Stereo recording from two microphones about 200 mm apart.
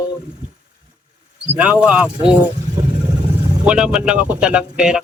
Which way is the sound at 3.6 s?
5° right (ahead or behind).